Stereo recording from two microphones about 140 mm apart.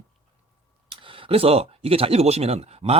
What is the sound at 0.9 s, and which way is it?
Speech, 40° right (ahead or behind).